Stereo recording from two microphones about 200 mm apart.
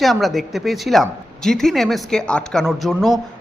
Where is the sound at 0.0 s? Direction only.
Centre (ahead or behind).